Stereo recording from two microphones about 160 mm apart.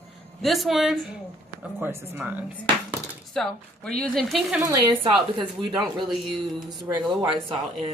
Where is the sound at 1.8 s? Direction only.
15° right (ahead or behind).